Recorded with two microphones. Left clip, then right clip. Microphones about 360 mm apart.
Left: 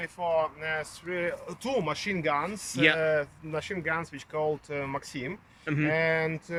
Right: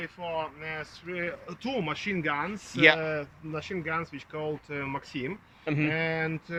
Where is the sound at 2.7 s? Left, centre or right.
Centre.